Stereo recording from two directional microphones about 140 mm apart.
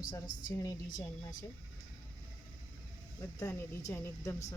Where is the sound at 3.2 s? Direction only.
20° left (ahead or behind).